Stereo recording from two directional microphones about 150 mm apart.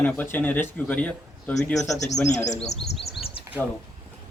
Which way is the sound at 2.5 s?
45° left (ahead or behind).